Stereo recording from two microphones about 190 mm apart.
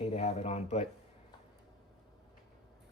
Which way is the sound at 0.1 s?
35° left (ahead or behind).